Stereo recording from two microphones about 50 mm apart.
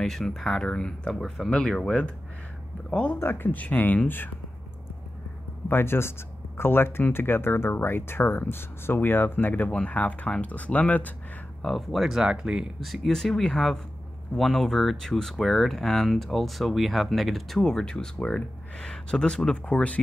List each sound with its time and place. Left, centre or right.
0.0 s speech: centre
3.2 s speech: left
3.5 s speech: left
5.7 s speech: left
9.7 s speech: left
11.6 s speech: centre
12.8 s speech: centre
13.1 s speech: centre
17.6 s speech: centre